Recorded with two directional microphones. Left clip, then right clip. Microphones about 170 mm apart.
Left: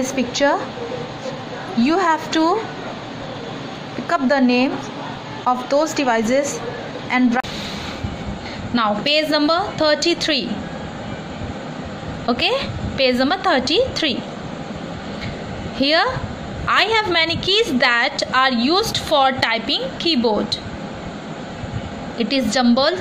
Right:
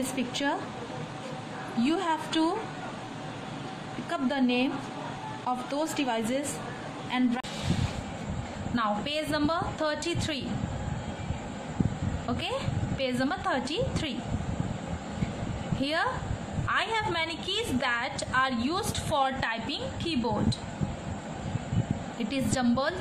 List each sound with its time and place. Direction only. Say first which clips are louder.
1.8 s speech: left 11 dB; 10° left (ahead or behind)
4.1 s speech: left 12 dB; 15° left (ahead or behind)
5.7 s speech: left 13 dB; 10° left (ahead or behind)
8.7 s a woman's voice: left 12 dB; 20° left (ahead or behind)
12.3 s a woman's voice: left 14 dB; 25° left (ahead or behind)
15.8 s a woman's voice: left 12 dB; 20° left (ahead or behind)
22.2 s a woman's voice: left 12 dB; 20° left (ahead or behind)